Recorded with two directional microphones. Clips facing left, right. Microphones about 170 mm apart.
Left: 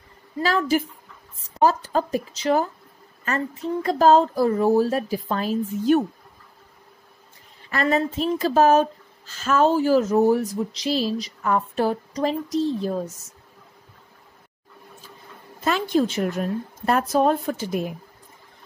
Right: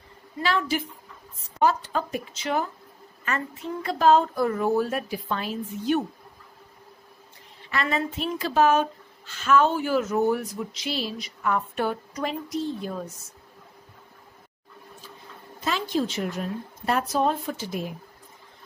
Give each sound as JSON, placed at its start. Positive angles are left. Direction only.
{"t": 0.4, "sound": "speech", "side_deg": 40}
{"t": 7.7, "sound": "speech", "side_deg": 40}
{"t": 15.6, "sound": "a woman's voice", "side_deg": 50}